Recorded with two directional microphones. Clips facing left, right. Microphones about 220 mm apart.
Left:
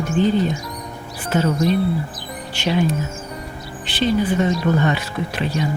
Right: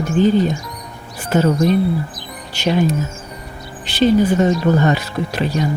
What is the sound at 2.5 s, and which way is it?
Speech, 40° right (ahead or behind).